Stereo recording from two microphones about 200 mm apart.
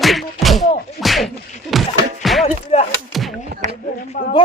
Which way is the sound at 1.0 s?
Centre (ahead or behind).